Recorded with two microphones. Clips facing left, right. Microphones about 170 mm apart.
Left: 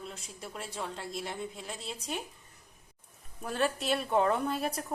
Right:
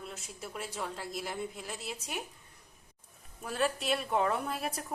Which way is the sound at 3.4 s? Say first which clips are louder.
Left 1 dB; centre (ahead or behind).